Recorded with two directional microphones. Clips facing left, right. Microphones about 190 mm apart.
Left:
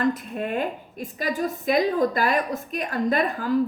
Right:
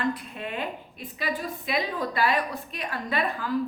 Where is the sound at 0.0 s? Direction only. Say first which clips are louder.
Left 5 dB; 45° left (ahead or behind).